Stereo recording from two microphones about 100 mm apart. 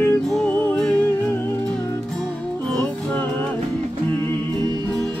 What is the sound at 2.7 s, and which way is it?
Music, 10° left (ahead or behind).